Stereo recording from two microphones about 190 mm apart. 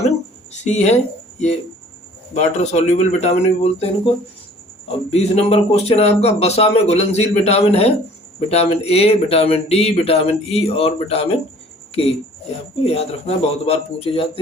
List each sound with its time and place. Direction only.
0.5 s speech: 35° left (ahead or behind)
2.3 s speech: 35° left (ahead or behind)
12.8 s speech: 35° left (ahead or behind)